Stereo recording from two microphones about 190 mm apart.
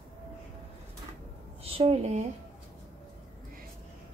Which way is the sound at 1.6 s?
30° right (ahead or behind).